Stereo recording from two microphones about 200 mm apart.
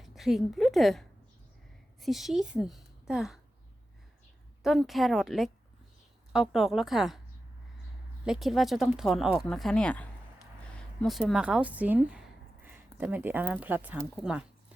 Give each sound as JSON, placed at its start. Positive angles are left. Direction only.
{"t": 0.0, "sound": "a woman's voice", "side_deg": 0}
{"t": 4.6, "sound": "speech", "side_deg": 0}
{"t": 8.2, "sound": "speech", "side_deg": 0}